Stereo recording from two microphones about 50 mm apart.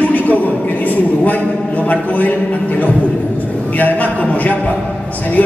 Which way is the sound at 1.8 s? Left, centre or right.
Left.